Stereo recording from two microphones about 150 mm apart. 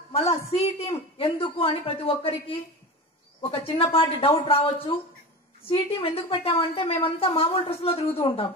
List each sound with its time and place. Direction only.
0.1 s a woman's voice: 45° left (ahead or behind)
3.5 s a woman's voice: 40° left (ahead or behind)